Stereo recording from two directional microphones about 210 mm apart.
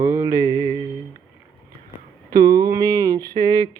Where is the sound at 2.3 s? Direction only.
20° right (ahead or behind).